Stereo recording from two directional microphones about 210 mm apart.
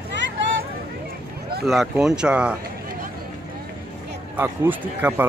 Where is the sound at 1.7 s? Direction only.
Centre (ahead or behind).